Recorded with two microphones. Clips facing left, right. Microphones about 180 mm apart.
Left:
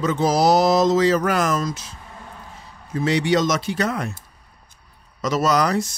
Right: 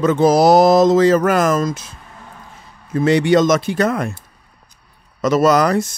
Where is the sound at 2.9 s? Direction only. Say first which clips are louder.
Right 6 dB; 55° right (ahead or behind).